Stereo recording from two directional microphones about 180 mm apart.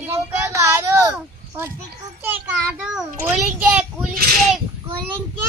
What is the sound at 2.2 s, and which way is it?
A child's voice, 10° right (ahead or behind).